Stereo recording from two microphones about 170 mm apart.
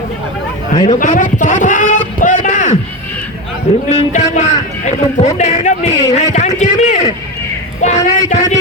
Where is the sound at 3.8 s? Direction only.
45° left (ahead or behind).